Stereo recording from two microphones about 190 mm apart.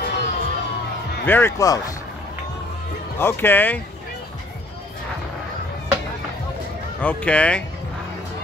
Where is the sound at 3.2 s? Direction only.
10° left (ahead or behind).